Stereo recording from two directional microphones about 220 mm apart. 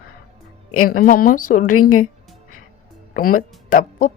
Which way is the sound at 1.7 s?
80° left.